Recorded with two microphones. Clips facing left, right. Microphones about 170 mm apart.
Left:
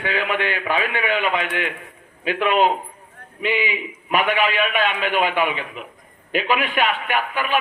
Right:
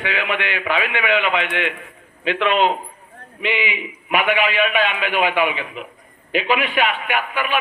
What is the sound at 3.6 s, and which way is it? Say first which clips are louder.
A man's voice: even; 40° left (ahead or behind).